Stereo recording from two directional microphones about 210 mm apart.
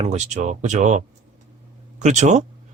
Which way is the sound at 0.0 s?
35° right (ahead or behind).